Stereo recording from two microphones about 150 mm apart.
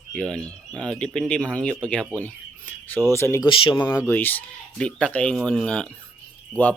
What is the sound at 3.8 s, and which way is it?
Speech, 15° left (ahead or behind).